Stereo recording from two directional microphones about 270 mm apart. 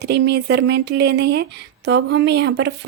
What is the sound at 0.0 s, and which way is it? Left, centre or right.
Speech, right.